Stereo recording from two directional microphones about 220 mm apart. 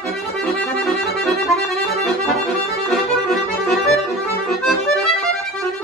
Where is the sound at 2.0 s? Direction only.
Centre (ahead or behind).